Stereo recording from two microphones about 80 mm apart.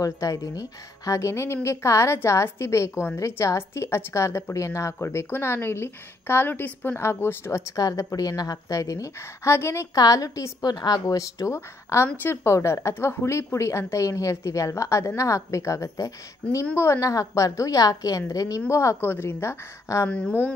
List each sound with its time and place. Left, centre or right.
0.0 s a woman's voice: left
7.7 s a woman's voice: left
9.9 s a woman's voice: left
10.7 s a woman's voice: left
20.1 s speech: centre